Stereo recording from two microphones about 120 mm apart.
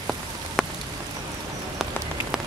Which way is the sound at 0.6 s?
5° left (ahead or behind).